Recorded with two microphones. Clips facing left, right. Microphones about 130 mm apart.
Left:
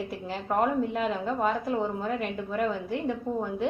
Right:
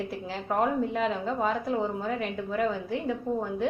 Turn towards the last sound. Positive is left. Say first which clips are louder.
# right 1 dB
turn(degrees=0)  # may be behind; listen again after turning